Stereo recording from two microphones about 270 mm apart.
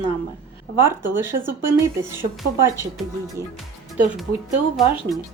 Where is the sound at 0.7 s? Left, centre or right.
Centre.